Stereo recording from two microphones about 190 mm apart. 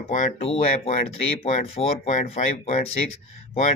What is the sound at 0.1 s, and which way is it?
Speech, 40° left (ahead or behind).